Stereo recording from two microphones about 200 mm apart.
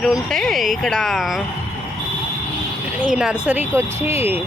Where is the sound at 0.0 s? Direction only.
Centre (ahead or behind).